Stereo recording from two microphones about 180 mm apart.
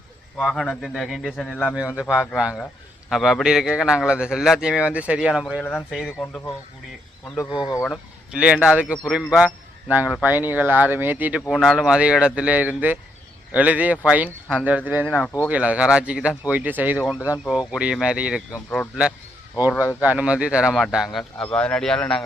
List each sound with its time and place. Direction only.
0.3 s a man's voice: centre (ahead or behind)
2.0 s a man's voice: 5° right (ahead or behind)
5.5 s a man's voice: 10° left (ahead or behind)
7.6 s speech: 20° left (ahead or behind)
8.3 s a man's voice: 5° right (ahead or behind)
15.0 s speech: 5° left (ahead or behind)
15.4 s speech: 5° right (ahead or behind)
17.2 s speech: 15° left (ahead or behind)
17.7 s a man's voice: 5° right (ahead or behind)
20.0 s a man's voice: 5° right (ahead or behind)